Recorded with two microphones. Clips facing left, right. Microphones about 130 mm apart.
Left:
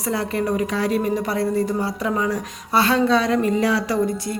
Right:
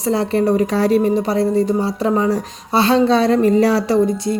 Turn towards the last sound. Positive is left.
turn(degrees=-35)  # may be behind; listen again after turning